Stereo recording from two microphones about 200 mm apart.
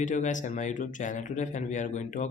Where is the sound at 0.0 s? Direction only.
40° left (ahead or behind).